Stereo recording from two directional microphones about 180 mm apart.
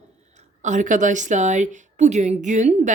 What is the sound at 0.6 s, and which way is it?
Speech, 45° right (ahead or behind).